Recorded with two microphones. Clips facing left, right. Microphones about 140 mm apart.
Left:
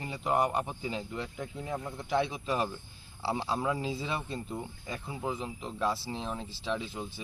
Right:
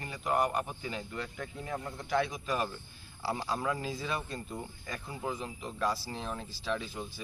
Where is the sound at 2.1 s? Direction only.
25° left (ahead or behind).